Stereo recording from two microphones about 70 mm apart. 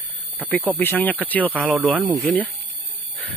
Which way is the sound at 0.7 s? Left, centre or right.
Left.